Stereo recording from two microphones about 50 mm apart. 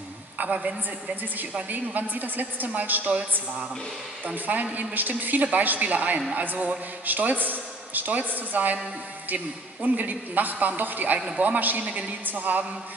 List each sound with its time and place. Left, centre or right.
0.4 s a woman's voice: right
4.7 s a man's voice: right
11.1 s a woman's voice: centre
11.4 s a man's voice: right